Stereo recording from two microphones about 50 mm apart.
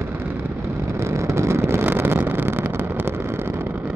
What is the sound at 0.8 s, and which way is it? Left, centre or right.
Vehicle, right.